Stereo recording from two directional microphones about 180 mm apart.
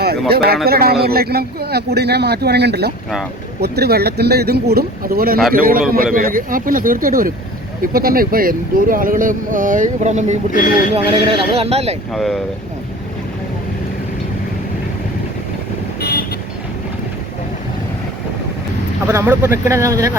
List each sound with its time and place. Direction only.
0.0 s speech: 60° right (ahead or behind); by 10.3 s 40° right (ahead or behind)
10.5 s speech: 50° left (ahead or behind)
10.9 s speech: 30° right (ahead or behind)
12.1 s speech: centre (ahead or behind)
16.0 s vehicle: 60° left (ahead or behind)
19.0 s speech: 15° right (ahead or behind)